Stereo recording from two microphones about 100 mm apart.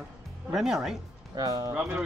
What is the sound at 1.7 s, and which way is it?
Speech, 15° right (ahead or behind).